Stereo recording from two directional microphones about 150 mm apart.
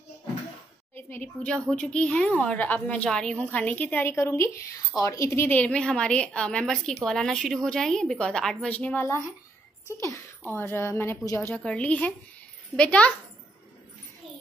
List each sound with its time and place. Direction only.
0.9 s a woman's voice: 10° left (ahead or behind)